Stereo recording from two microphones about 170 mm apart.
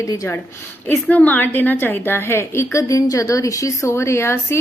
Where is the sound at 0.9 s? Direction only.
10° left (ahead or behind).